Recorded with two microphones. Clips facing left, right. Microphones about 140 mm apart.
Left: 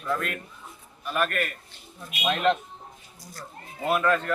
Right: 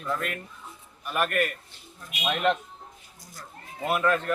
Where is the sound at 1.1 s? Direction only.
10° right (ahead or behind).